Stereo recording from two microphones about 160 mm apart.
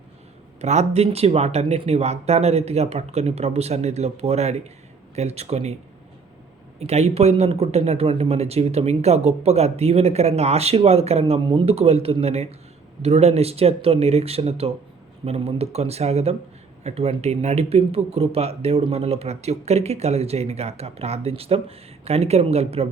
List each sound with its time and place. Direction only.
0.6 s speech: 45° right (ahead or behind)
6.7 s speech: 40° right (ahead or behind)